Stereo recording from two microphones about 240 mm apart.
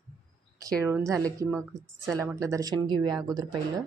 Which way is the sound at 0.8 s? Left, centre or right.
Centre.